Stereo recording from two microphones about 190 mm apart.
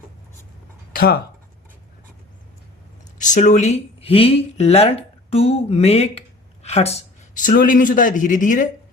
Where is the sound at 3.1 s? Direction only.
40° left (ahead or behind).